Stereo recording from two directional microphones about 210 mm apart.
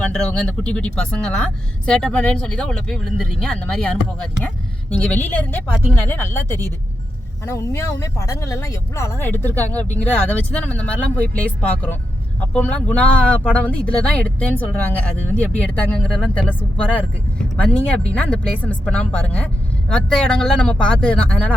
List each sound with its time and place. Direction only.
0.0 s speech: 5° left (ahead or behind)
6.5 s speech: 15° right (ahead or behind)
7.4 s speech: 10° left (ahead or behind)